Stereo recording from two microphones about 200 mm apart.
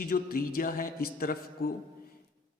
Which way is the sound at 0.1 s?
45° left (ahead or behind).